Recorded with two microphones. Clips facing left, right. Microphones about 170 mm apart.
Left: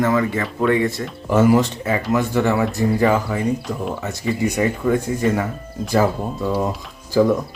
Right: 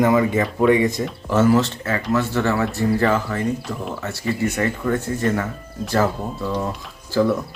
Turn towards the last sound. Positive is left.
turn(degrees=15)  # may be behind; listen again after turning